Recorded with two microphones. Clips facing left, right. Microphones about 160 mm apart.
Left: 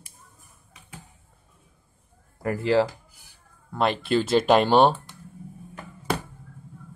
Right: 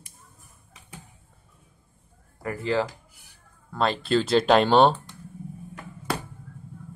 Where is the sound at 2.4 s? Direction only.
35° left (ahead or behind).